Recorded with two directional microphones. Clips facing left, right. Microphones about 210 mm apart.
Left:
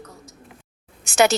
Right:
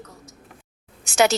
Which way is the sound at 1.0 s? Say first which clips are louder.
Left 1 dB; 55° left (ahead or behind).